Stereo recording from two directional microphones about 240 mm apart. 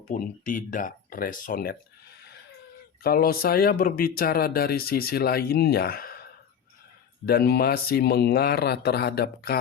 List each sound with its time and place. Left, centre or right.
0.1 s speech: left
3.0 s speech: left